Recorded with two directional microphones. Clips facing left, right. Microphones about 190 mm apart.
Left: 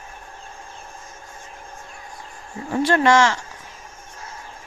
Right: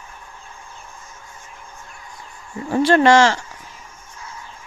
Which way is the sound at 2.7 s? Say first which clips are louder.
Right 4 dB; 30° right (ahead or behind).